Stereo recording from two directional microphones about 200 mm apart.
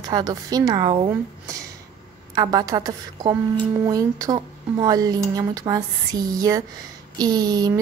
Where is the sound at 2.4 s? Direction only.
20° right (ahead or behind).